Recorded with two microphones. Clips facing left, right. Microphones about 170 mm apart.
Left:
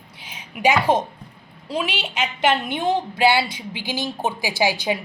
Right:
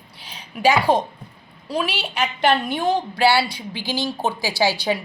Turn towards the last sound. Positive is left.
turn(degrees=15)  # may be behind; listen again after turning